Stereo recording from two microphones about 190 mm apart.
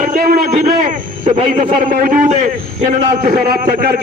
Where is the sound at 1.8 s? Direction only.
45° right (ahead or behind).